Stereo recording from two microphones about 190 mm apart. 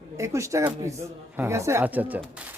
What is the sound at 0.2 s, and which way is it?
Speech, 15° right (ahead or behind).